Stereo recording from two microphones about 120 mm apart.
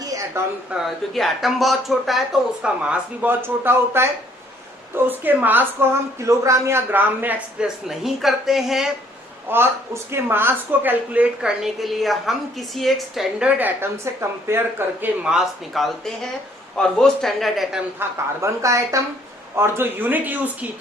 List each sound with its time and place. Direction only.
0.0 s a sound: 25° right (ahead or behind)
0.7 s speech: centre (ahead or behind)
7.9 s speech: centre (ahead or behind)
9.5 s speech: 20° right (ahead or behind); by 13.5 s centre (ahead or behind)
13.6 s speech: 15° right (ahead or behind)
15.2 s speech: 5° right (ahead or behind)
18.3 s speech: 25° right (ahead or behind)